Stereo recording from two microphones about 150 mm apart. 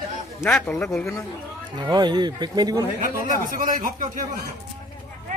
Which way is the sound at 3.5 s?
65° right (ahead or behind).